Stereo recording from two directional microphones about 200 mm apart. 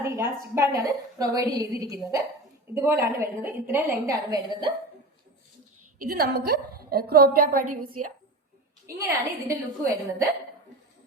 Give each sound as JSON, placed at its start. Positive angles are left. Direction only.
{"t": 0.0, "sound": "a woman's voice", "side_deg": -15}
{"t": 6.0, "sound": "a woman's voice", "side_deg": -50}
{"t": 9.0, "sound": "a woman's voice", "side_deg": -15}